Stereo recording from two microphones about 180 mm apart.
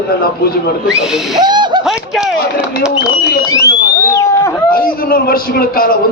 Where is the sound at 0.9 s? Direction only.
5° right (ahead or behind).